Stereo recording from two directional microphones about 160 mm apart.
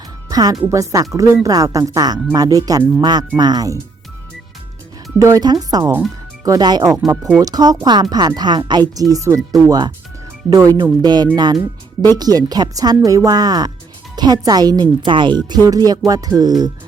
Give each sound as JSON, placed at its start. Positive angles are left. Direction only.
{"t": 0.3, "sound": "speech", "side_deg": -25}
{"t": 5.2, "sound": "speech", "side_deg": -20}